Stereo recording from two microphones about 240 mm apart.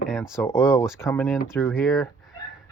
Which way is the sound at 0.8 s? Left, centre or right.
Centre.